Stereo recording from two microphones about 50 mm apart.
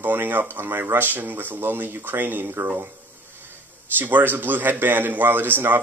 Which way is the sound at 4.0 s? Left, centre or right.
Right.